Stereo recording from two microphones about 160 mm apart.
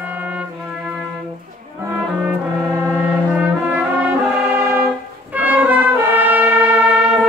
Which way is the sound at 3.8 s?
10° right (ahead or behind).